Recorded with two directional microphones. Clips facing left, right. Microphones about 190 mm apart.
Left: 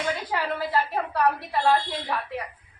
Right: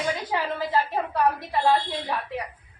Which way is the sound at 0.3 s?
20° right (ahead or behind).